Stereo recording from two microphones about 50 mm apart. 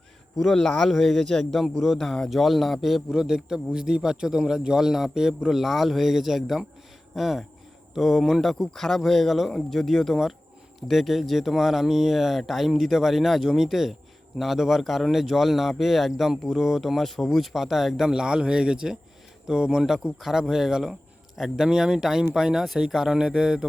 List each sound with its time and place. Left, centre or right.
0.5 s speech: centre
3.2 s a man's voice: centre